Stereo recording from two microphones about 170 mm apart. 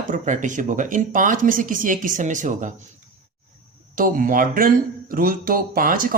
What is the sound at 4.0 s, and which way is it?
Speech, 55° right (ahead or behind).